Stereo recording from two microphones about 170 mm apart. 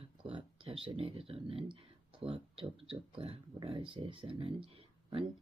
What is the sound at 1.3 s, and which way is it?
Speech, 35° right (ahead or behind).